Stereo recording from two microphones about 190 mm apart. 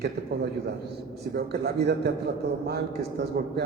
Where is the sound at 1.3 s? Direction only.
55° right (ahead or behind).